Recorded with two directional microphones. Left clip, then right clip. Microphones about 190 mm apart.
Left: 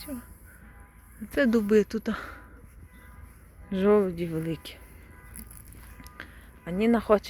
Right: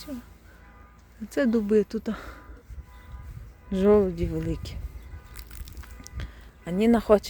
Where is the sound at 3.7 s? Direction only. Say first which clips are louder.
Right 2 dB; 20° right (ahead or behind).